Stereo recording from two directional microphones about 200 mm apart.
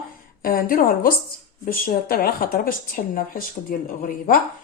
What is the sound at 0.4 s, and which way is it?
Speech, 45° left (ahead or behind).